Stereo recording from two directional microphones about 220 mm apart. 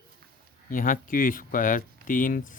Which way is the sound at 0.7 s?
40° left (ahead or behind).